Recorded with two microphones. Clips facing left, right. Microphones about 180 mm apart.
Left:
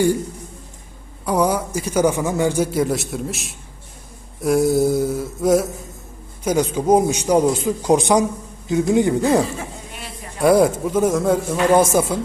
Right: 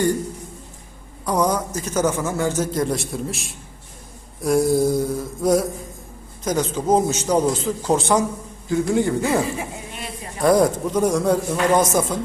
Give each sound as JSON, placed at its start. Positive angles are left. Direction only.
{"t": 1.2, "sound": "a man's voice", "side_deg": 5}
{"t": 4.4, "sound": "a sound", "side_deg": 0}
{"t": 6.4, "sound": "a man's voice", "side_deg": 10}
{"t": 10.4, "sound": "a man's voice", "side_deg": 5}